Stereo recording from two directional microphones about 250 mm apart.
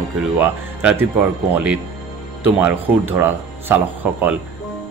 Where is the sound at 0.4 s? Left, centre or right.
Centre.